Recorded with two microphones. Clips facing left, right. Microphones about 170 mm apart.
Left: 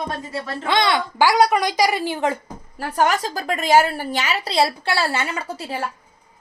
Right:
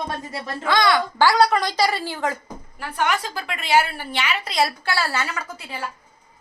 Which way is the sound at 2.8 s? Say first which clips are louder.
Left 4 dB; 40° left (ahead or behind).